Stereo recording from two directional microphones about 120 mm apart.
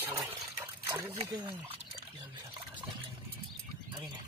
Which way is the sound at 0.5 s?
25° right (ahead or behind).